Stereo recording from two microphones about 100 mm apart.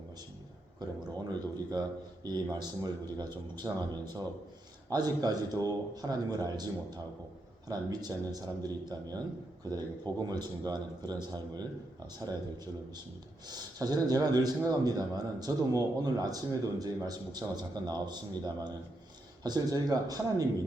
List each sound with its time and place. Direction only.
0.8 s a man's voice: 45° right (ahead or behind)
3.6 s speech: 25° right (ahead or behind)
4.0 s a man's voice: 40° right (ahead or behind)
13.5 s a man's voice: 40° right (ahead or behind)